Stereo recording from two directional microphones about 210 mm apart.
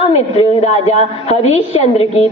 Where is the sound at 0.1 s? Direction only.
30° left (ahead or behind).